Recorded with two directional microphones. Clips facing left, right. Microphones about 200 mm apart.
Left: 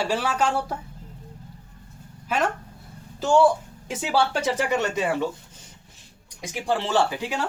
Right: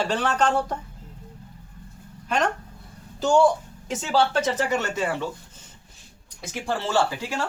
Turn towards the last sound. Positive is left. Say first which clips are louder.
# left 1 dB
turn(degrees=15)  # may be behind; listen again after turning